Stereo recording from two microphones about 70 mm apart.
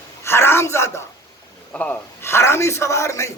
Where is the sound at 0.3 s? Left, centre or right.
Left.